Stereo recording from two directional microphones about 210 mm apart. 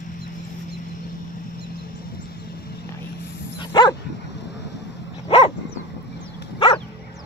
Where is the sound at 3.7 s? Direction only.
20° left (ahead or behind).